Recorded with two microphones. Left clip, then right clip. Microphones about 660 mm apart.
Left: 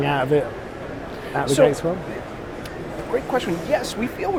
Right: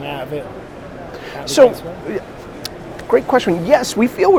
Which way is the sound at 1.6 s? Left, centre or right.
Right.